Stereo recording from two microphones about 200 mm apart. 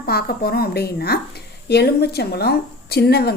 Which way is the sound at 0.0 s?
50° left (ahead or behind).